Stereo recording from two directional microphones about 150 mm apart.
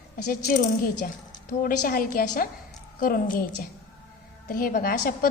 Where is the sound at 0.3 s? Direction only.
75° left (ahead or behind).